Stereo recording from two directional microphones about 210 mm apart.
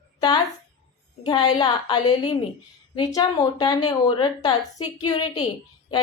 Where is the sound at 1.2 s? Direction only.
20° left (ahead or behind).